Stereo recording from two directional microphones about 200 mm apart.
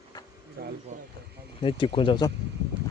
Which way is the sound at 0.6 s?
50° right (ahead or behind).